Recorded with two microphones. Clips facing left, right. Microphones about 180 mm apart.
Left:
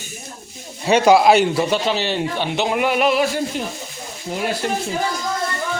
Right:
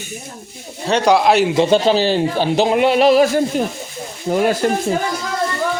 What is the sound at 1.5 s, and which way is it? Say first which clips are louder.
Speech: right 6 dB; 30° right (ahead or behind).